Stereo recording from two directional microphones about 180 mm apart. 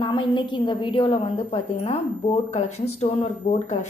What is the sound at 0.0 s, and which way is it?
A woman's voice, 25° left (ahead or behind).